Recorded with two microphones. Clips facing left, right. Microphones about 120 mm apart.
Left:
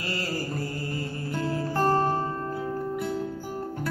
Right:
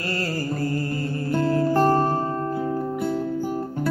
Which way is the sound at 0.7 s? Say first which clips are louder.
Right 6 dB; 50° right (ahead or behind).